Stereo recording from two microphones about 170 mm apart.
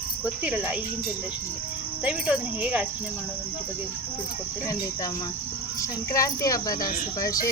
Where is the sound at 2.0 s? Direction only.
5° right (ahead or behind).